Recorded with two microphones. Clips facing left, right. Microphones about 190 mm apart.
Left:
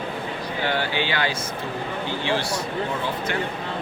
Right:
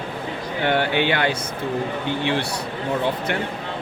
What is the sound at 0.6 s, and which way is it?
A man's voice, 60° right (ahead or behind).